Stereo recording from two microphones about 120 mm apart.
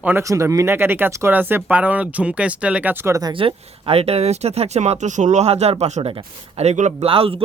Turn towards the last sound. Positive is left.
turn(degrees=-50)  # may be behind; listen again after turning